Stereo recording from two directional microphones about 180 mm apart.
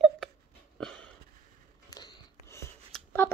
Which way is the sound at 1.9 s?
20° left (ahead or behind).